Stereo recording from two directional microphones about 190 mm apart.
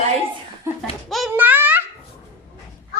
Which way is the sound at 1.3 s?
10° right (ahead or behind).